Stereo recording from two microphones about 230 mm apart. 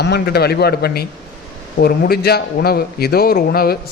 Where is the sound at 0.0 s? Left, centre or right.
Left.